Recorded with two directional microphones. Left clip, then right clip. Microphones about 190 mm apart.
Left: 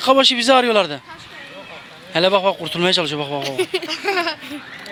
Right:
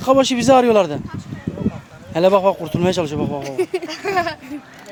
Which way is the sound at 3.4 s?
60° right (ahead or behind).